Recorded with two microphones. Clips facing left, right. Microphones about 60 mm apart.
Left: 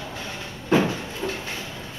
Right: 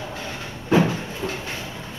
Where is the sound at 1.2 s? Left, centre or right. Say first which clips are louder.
Even; centre.